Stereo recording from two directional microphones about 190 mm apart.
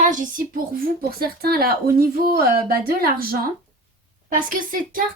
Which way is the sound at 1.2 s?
55° right (ahead or behind).